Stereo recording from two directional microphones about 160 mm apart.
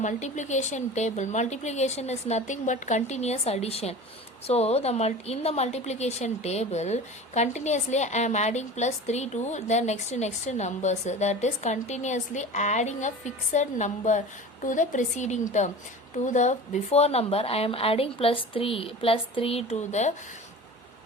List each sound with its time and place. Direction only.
0.0 s a woman's voice: 50° left (ahead or behind)